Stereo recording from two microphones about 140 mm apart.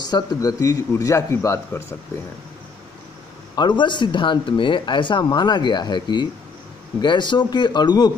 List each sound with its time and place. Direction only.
0.0 s speech: 30° left (ahead or behind)
3.5 s speech: 35° left (ahead or behind)